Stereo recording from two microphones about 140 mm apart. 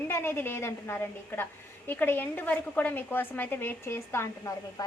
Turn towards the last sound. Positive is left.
turn(degrees=20)  # may be behind; listen again after turning